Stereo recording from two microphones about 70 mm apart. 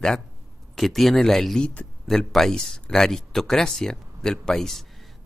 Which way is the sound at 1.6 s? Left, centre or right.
Centre.